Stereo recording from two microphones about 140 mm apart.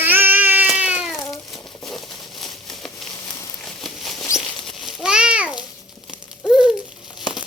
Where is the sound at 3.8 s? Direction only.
Centre (ahead or behind).